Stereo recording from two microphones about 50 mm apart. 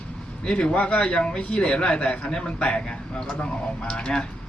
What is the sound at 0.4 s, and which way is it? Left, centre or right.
A man's voice, centre.